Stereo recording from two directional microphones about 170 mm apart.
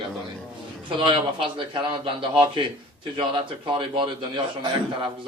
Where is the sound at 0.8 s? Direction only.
30° right (ahead or behind).